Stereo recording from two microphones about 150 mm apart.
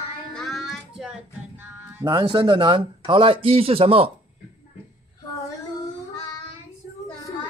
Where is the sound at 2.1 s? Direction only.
30° right (ahead or behind).